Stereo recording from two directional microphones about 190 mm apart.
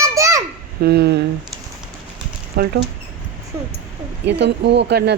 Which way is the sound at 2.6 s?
55° right (ahead or behind).